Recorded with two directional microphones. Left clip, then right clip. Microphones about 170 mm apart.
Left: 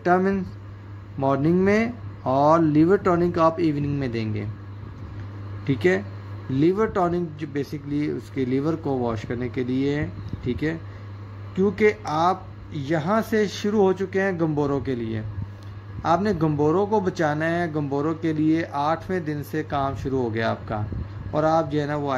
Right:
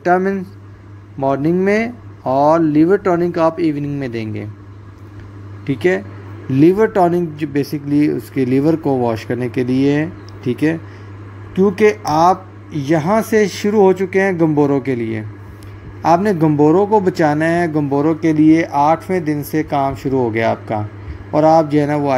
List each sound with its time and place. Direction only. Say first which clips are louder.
0.0 s a man's voice: right 6 dB; 20° right (ahead or behind)
6.6 s a man's voice: right 9 dB; 15° right (ahead or behind)